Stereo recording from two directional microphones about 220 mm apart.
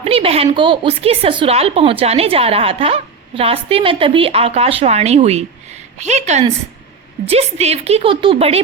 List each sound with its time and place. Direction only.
0.0 s a woman's voice: 25° right (ahead or behind)